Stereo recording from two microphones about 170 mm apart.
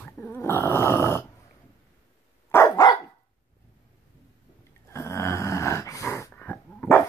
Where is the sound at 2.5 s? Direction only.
20° left (ahead or behind).